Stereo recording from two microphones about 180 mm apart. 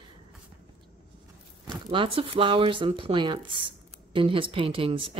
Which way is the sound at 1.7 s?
30° right (ahead or behind).